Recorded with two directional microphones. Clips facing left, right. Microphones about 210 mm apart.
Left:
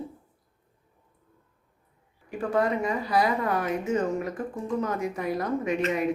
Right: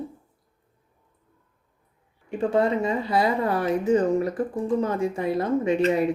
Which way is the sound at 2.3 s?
25° right (ahead or behind).